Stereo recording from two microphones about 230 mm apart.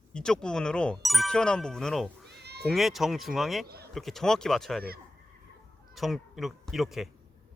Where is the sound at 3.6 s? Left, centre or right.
Right.